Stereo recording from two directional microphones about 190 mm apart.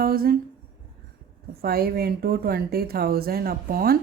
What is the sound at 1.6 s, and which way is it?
A woman's voice, 55° right (ahead or behind).